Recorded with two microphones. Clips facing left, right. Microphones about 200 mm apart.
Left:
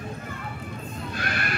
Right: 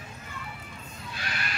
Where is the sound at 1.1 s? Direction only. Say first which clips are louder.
Left 6 dB; 55° left (ahead or behind).